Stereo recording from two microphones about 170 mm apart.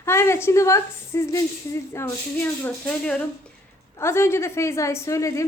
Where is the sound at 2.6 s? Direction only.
5° left (ahead or behind).